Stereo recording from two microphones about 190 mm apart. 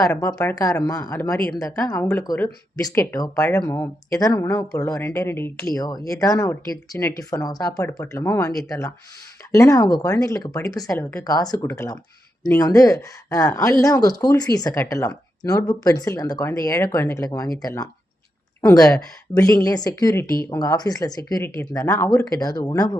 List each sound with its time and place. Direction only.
0.0 s speech: 20° left (ahead or behind)